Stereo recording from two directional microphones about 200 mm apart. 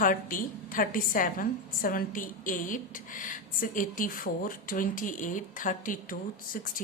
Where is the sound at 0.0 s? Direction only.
40° left (ahead or behind).